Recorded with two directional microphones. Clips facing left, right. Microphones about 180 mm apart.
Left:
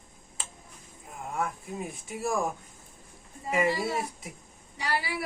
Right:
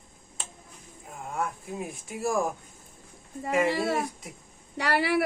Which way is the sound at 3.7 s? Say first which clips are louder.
Right 2 dB; 65° right (ahead or behind).